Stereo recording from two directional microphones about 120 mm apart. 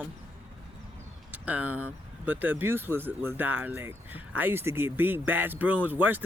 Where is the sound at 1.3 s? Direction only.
10° right (ahead or behind).